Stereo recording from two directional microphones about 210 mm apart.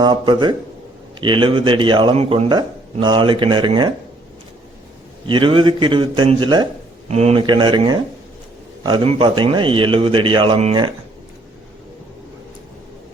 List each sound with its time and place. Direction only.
0.0 s a man's voice: 20° right (ahead or behind)
5.2 s a man's voice: 25° right (ahead or behind)